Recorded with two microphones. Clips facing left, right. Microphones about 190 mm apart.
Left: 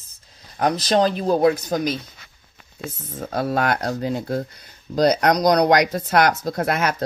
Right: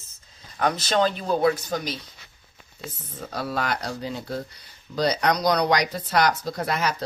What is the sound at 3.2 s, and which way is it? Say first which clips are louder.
Speech: left 6 dB; 55° left (ahead or behind).